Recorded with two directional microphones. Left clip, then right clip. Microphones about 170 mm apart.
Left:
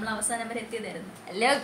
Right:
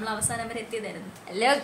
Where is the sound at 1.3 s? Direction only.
10° right (ahead or behind).